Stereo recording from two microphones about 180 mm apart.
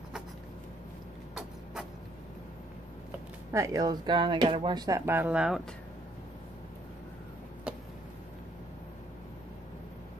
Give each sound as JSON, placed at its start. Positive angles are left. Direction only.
{"t": 3.5, "sound": "speech", "side_deg": -20}